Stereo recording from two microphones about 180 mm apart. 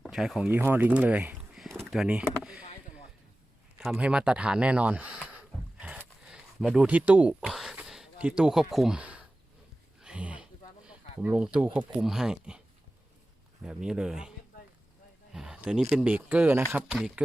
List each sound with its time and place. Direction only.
0.0 s speech: centre (ahead or behind)
3.8 s speech: 5° right (ahead or behind)
5.8 s a sound: 5° right (ahead or behind)
13.6 s speech: 5° right (ahead or behind)